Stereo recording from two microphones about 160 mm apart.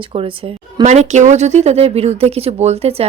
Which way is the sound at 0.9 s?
45° right (ahead or behind).